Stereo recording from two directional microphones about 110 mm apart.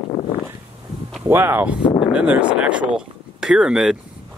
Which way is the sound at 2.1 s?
10° right (ahead or behind).